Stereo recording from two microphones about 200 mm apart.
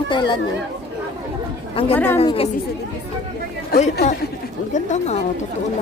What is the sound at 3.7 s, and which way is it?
Speech, 50° left (ahead or behind).